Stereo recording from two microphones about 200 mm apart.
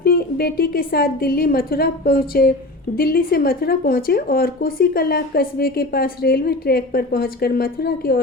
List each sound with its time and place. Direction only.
0.0 s a woman's voice: 50° left (ahead or behind)